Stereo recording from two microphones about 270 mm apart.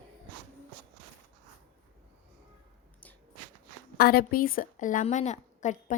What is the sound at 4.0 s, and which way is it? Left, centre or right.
A woman's voice, left.